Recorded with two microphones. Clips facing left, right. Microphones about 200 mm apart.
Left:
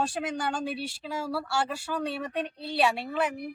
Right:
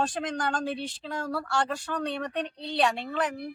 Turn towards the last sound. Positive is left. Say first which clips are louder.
# left 1 dB
turn(degrees=10)  # may be behind; listen again after turning